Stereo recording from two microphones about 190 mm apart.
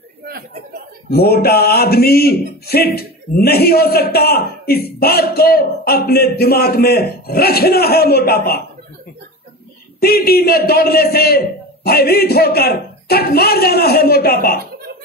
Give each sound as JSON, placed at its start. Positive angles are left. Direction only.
{"t": 1.1, "sound": "speech", "side_deg": 55}
{"t": 10.0, "sound": "speech", "side_deg": 55}